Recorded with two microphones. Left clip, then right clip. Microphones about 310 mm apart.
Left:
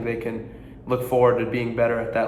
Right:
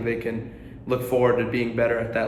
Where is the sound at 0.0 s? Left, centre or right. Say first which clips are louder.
Right 1 dB; centre.